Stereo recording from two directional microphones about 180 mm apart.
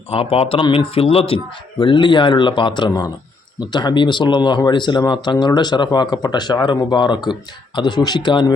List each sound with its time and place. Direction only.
0.1 s speech: 35° left (ahead or behind)